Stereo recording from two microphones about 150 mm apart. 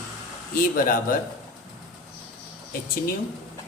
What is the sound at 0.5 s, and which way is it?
Speech, 70° left (ahead or behind).